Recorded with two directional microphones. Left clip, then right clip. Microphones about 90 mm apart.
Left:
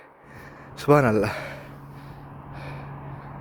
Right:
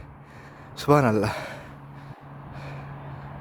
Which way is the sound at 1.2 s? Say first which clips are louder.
Left 1 dB; 50° right (ahead or behind).